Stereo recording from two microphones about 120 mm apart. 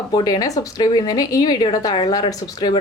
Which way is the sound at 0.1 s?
35° left (ahead or behind).